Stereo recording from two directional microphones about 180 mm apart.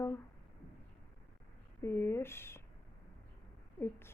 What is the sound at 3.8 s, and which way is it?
Speech, 15° left (ahead or behind).